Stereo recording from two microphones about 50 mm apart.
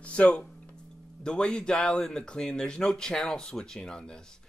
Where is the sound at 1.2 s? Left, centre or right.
Centre.